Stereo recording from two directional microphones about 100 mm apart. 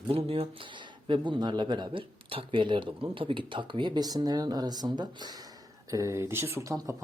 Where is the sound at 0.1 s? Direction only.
70° right (ahead or behind).